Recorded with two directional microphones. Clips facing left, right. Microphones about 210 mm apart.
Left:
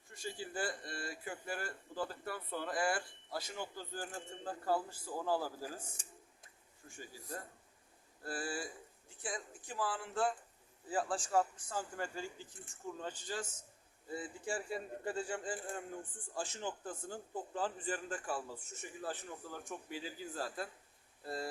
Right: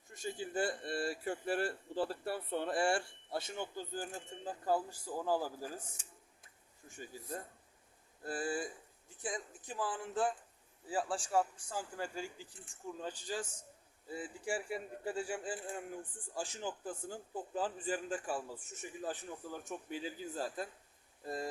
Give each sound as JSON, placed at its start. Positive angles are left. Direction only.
{"t": 0.1, "sound": "speech", "side_deg": -20}
{"t": 6.8, "sound": "a man's voice", "side_deg": -20}